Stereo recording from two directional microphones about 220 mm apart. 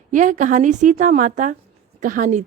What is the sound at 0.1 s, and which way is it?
Speech, 35° right (ahead or behind).